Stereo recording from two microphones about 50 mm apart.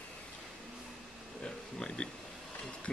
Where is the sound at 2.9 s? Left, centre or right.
Left.